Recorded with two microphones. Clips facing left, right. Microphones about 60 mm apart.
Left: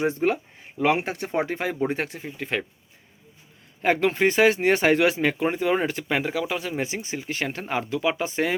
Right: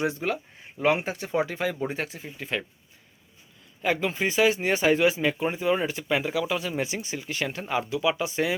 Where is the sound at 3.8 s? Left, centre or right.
Left.